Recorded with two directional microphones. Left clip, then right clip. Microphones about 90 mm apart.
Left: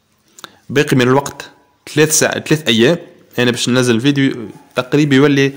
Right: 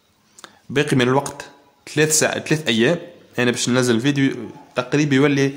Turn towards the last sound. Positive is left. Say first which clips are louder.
# left 6 dB
turn(degrees=35)  # may be behind; listen again after turning